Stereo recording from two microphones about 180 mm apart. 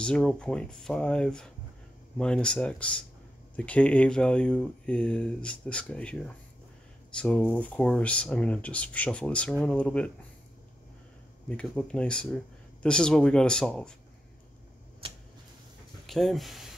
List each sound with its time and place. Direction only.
0.0 s speech: 5° left (ahead or behind)
11.4 s speech: 5° left (ahead or behind)
16.1 s speech: centre (ahead or behind)